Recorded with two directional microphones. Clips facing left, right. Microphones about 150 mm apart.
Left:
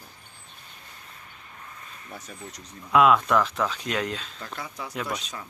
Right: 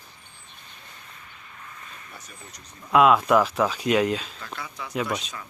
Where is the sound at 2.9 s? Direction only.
Centre (ahead or behind).